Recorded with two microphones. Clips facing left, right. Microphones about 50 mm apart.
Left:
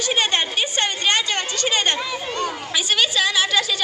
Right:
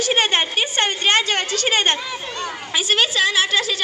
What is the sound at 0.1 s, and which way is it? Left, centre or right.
A woman's voice, right.